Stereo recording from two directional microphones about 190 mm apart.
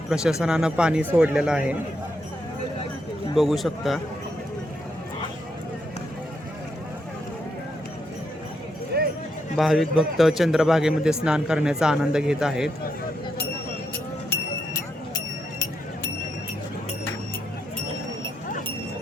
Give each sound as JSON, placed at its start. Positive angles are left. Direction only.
{"t": 0.1, "sound": "a man's voice", "side_deg": -5}
{"t": 3.3, "sound": "a man's voice", "side_deg": 0}
{"t": 8.9, "sound": "clip-clop", "side_deg": -55}
{"t": 9.6, "sound": "a man's voice", "side_deg": 0}